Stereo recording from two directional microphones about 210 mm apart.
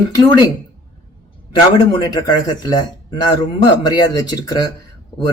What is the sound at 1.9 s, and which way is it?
Speech, 20° left (ahead or behind).